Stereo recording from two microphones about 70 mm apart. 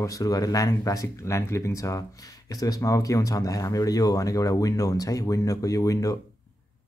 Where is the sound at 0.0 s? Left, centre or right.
Left.